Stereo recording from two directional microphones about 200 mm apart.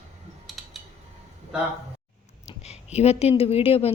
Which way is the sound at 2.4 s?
30° left (ahead or behind).